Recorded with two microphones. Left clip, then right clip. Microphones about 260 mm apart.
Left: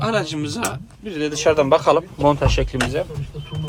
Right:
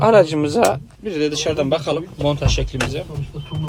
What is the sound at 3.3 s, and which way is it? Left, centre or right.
Speech, centre.